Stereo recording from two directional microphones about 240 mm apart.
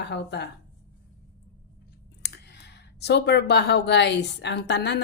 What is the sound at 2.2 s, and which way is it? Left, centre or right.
Speech, left.